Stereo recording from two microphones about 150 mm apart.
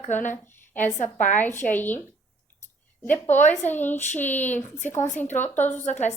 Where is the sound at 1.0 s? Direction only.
55° left (ahead or behind).